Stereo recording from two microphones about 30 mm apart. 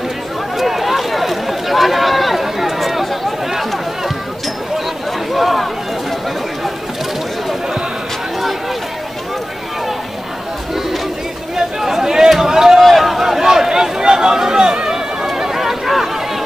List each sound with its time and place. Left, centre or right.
0.6 s run: centre
2.8 s chatter: centre
5.3 s chatter: centre
11.5 s chatter: centre
12.3 s a sound: centre
15.5 s a sound: centre